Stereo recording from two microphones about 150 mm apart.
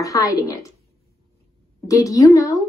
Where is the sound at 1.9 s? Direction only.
20° left (ahead or behind).